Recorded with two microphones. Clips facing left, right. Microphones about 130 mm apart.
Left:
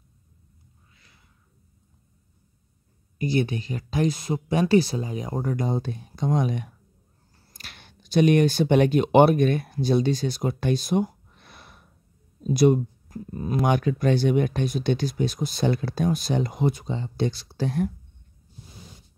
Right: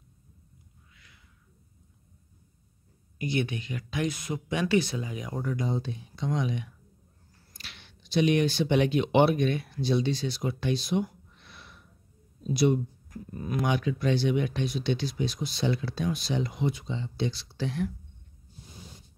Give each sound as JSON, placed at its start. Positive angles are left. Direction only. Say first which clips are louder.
{"t": 0.9, "sound": "a sound", "louder": "right 1 dB", "side_deg": 35}
{"t": 3.2, "sound": "speech", "louder": "left 5 dB", "side_deg": 35}
{"t": 13.1, "sound": "speech", "louder": "left 5 dB", "side_deg": 30}
{"t": 13.7, "sound": "speech", "louder": "left 5 dB", "side_deg": 50}